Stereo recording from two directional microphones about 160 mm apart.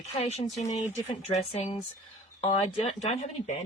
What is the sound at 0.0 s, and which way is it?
Speech, 45° left (ahead or behind).